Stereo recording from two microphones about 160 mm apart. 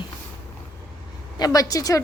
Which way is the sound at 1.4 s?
20° left (ahead or behind).